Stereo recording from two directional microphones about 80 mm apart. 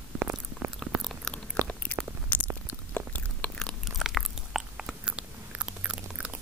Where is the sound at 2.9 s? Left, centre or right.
Centre.